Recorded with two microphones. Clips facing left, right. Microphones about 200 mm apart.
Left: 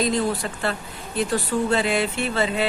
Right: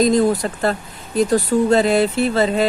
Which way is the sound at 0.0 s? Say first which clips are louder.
Right 7 dB; 40° right (ahead or behind).